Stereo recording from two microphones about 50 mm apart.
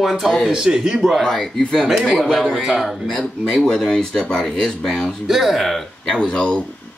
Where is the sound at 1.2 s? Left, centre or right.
Centre.